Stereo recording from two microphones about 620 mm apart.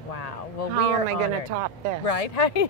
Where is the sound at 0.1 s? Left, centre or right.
Left.